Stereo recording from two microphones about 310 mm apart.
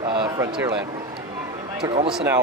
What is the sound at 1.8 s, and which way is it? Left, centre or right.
Speech, centre.